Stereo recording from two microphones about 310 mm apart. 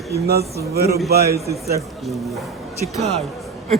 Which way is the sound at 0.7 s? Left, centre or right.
Right.